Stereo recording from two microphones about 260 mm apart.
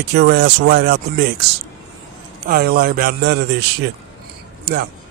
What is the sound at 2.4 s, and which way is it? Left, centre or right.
Speech, right.